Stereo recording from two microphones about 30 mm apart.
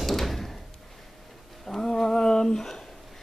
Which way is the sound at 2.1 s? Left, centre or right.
Left.